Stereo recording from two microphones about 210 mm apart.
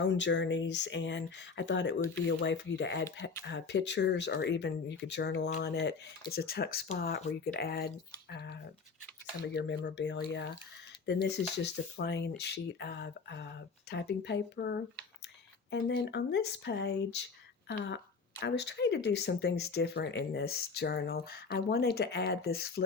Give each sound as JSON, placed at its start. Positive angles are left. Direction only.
{"t": 0.1, "sound": "a woman's voice", "side_deg": 55}